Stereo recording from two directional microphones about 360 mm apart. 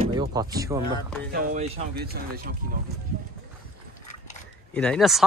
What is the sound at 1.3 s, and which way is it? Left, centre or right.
Speech, right.